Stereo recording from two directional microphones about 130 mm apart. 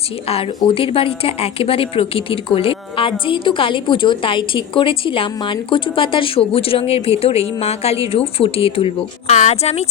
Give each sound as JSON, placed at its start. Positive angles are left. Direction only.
{"t": 0.7, "sound": "speech", "side_deg": 45}